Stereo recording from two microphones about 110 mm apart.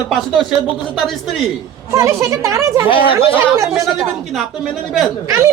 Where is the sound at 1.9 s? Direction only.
30° right (ahead or behind).